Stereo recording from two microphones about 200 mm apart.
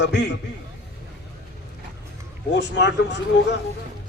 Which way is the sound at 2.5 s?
60° left (ahead or behind).